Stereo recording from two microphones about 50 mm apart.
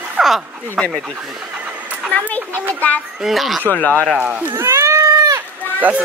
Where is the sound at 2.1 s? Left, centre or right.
Left.